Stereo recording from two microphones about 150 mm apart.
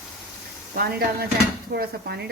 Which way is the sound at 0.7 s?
90° right.